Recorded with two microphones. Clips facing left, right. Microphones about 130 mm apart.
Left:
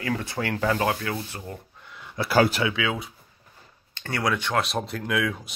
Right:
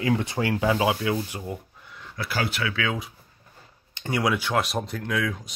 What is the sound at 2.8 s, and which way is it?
Speech, centre (ahead or behind).